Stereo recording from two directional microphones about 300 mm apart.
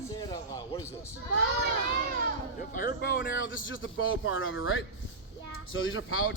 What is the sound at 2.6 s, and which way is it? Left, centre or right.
A man's voice, left.